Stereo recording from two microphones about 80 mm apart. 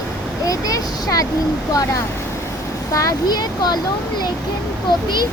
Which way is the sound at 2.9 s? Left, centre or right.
Left.